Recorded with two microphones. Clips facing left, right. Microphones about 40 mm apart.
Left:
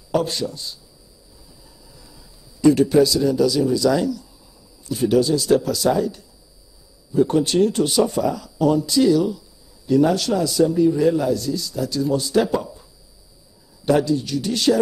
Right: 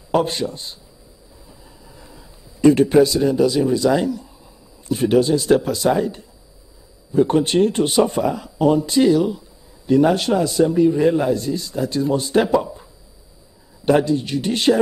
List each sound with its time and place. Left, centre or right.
0.1 s a man's voice: right
1.5 s a sound: right
4.8 s a man's voice: right
13.8 s a man's voice: right